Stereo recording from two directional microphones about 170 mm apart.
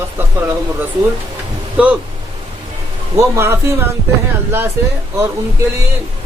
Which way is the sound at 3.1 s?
15° right (ahead or behind).